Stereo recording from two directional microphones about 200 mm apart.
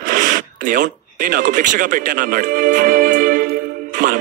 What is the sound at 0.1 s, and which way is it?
Radio, 45° right (ahead or behind).